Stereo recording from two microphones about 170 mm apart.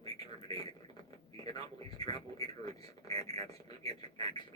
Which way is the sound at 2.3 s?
35° right (ahead or behind).